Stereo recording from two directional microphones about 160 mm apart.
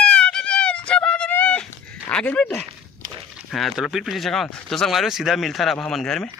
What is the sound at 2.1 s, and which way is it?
Speech, 5° left (ahead or behind).